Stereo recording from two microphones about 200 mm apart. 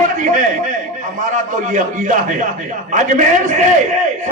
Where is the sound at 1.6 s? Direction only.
40° right (ahead or behind).